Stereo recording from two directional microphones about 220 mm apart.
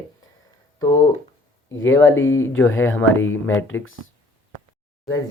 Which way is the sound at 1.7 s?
60° left (ahead or behind).